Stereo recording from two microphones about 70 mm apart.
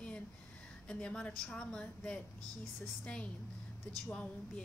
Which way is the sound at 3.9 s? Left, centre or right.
Centre.